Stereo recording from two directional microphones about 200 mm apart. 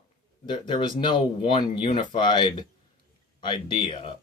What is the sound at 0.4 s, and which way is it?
Speech, 25° left (ahead or behind).